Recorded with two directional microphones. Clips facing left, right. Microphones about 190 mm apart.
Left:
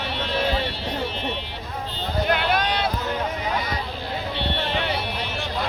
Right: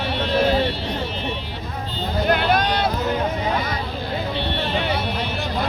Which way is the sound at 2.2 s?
45° right (ahead or behind).